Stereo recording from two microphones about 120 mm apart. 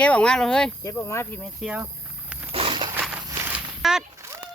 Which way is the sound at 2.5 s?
45° right (ahead or behind).